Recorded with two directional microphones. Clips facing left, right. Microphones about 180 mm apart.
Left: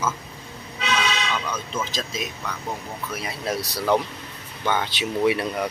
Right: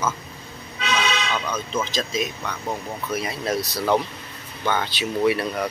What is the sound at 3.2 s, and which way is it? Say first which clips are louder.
Speech: even; 10° left (ahead or behind).